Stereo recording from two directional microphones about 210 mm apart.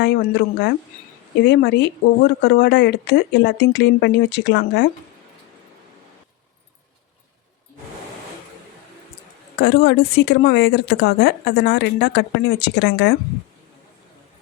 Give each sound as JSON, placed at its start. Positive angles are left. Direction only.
{"t": 0.0, "sound": "a woman's voice", "side_deg": 55}
{"t": 9.6, "sound": "a woman's voice", "side_deg": 55}